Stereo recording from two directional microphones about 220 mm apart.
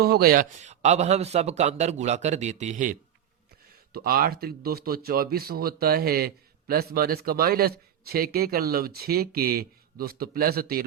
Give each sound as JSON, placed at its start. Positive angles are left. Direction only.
{"t": 0.0, "sound": "a man's voice", "side_deg": -45}